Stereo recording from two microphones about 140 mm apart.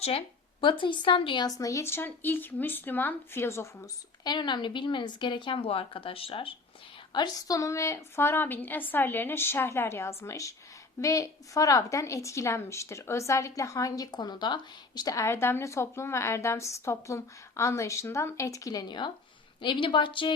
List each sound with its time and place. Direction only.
0.0 s a woman's voice: 45° left (ahead or behind); by 3.8 s 20° left (ahead or behind)
4.2 s a woman's voice: 30° left (ahead or behind)
7.1 s a woman's voice: 30° left (ahead or behind)